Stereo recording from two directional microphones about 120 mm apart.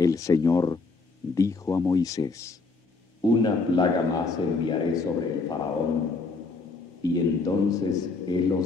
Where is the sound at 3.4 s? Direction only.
35° left (ahead or behind).